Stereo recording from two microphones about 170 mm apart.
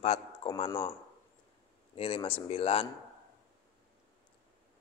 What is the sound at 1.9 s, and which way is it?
Speech, 35° left (ahead or behind).